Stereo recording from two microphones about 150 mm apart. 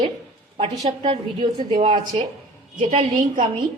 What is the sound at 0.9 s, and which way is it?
A woman's voice, 35° right (ahead or behind).